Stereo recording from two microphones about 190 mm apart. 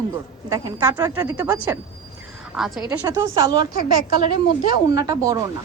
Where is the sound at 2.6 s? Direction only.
Centre (ahead or behind).